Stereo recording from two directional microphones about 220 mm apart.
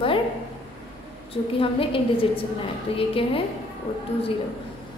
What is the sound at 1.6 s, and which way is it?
A woman's voice, 25° left (ahead or behind).